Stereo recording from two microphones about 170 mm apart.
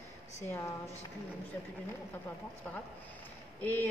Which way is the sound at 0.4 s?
20° left (ahead or behind).